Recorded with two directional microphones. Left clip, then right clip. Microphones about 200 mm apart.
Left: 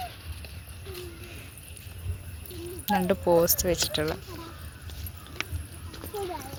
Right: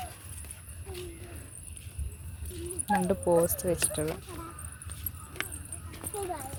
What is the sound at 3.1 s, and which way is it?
Speech, centre (ahead or behind).